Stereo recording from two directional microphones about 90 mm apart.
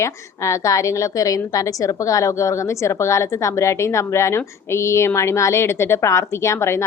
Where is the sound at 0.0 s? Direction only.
35° left (ahead or behind).